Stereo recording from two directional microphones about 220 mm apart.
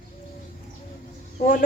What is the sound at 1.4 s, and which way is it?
Speech, 40° left (ahead or behind).